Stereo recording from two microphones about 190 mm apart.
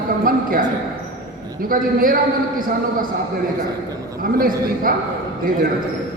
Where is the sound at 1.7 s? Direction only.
45° right (ahead or behind).